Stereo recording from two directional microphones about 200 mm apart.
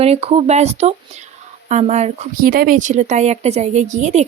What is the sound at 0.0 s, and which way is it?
Speech, 30° right (ahead or behind).